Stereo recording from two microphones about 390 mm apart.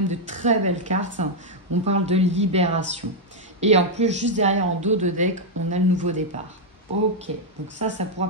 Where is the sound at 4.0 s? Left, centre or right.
Centre.